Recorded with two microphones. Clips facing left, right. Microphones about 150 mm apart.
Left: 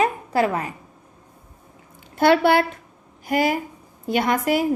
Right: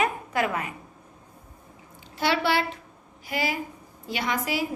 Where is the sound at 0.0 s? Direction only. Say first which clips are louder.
Left 5 dB; 35° left (ahead or behind).